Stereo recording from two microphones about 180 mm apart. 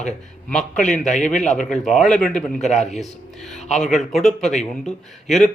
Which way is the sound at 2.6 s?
40° left (ahead or behind).